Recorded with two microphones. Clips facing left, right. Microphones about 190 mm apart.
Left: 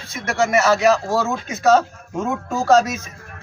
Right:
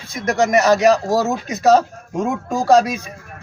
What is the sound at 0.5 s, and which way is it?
Speech, 15° right (ahead or behind).